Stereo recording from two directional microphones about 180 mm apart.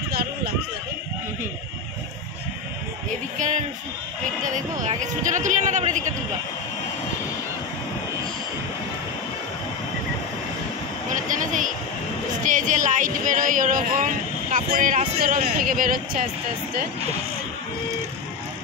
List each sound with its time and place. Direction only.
3.3 s a sound: 45° right (ahead or behind)
4.8 s speech: 45° right (ahead or behind)
12.4 s speech: 45° right (ahead or behind)